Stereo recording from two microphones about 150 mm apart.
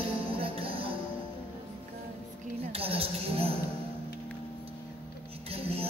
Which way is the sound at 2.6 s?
40° right (ahead or behind).